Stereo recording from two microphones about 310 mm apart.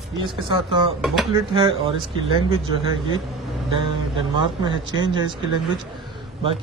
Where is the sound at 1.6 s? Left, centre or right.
Centre.